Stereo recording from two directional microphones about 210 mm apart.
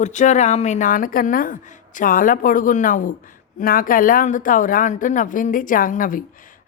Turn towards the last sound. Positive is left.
turn(degrees=40)  # may be behind; listen again after turning